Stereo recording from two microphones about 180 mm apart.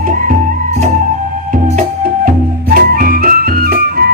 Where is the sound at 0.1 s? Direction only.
50° right (ahead or behind).